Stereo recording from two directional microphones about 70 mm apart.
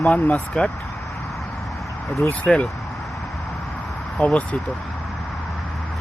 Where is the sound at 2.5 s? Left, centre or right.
Centre.